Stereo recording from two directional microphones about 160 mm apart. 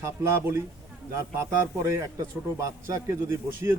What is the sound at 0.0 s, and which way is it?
Speech, 15° right (ahead or behind).